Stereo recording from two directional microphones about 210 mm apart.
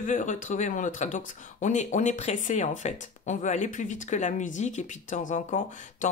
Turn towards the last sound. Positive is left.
turn(degrees=35)  # may be behind; listen again after turning